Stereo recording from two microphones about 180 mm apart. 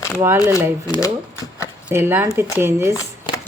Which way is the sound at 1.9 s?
10° right (ahead or behind).